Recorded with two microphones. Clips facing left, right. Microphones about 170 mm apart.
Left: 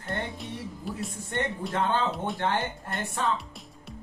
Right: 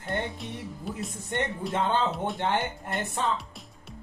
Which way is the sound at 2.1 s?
Centre (ahead or behind).